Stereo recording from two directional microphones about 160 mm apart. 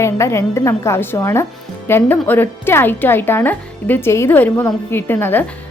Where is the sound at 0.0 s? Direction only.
15° left (ahead or behind).